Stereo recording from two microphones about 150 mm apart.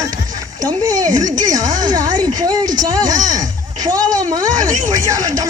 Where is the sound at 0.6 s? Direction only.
25° right (ahead or behind).